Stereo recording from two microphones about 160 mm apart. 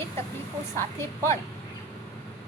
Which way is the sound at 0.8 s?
15° left (ahead or behind).